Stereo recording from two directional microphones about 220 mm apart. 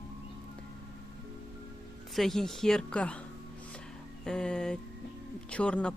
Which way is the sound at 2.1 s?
Centre (ahead or behind).